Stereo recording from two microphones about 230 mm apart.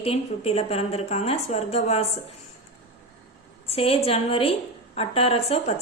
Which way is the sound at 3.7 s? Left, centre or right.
Left.